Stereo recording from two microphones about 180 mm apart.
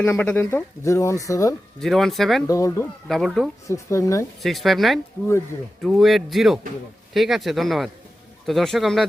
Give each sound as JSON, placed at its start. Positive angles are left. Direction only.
{"t": 0.0, "sound": "speech", "side_deg": 10}
{"t": 1.8, "sound": "speech", "side_deg": 0}
{"t": 2.5, "sound": "speech", "side_deg": 15}
{"t": 3.1, "sound": "speech", "side_deg": 0}
{"t": 3.7, "sound": "speech", "side_deg": 15}
{"t": 4.4, "sound": "speech", "side_deg": 0}